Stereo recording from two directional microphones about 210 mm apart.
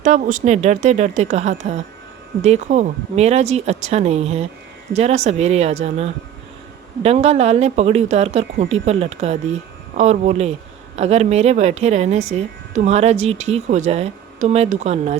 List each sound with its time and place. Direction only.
0.0 s speech: 35° right (ahead or behind)